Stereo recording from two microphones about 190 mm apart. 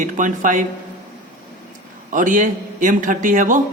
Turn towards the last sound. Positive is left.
turn(degrees=-45)  # may be behind; listen again after turning